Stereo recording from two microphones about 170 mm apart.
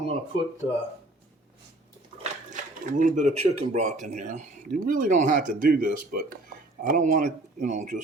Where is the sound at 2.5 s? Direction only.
50° right (ahead or behind).